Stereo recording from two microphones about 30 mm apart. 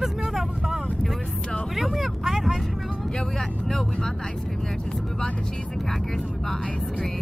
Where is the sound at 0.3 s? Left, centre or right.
Centre.